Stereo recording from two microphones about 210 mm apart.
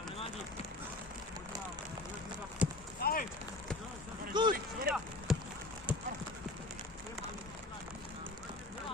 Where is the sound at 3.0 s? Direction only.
45° left (ahead or behind).